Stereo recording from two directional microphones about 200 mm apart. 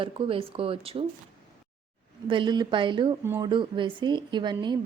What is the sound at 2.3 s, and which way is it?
Speech, 25° right (ahead or behind).